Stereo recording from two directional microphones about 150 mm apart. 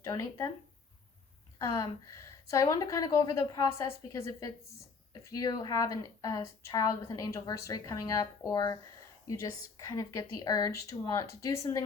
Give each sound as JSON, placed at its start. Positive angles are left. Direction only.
{"t": 0.0, "sound": "a woman's voice", "side_deg": 20}
{"t": 1.5, "sound": "a woman's voice", "side_deg": 20}